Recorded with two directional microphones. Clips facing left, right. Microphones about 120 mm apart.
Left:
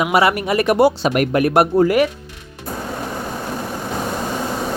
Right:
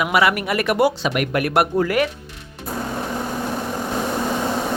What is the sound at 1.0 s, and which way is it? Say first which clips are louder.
Speech: left 4 dB; 40° left (ahead or behind).